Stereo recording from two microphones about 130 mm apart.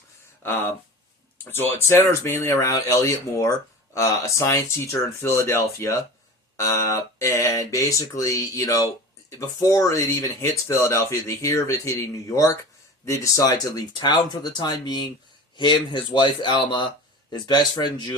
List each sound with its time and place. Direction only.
0.4 s speech: 20° left (ahead or behind); by 18.1 s 35° left (ahead or behind)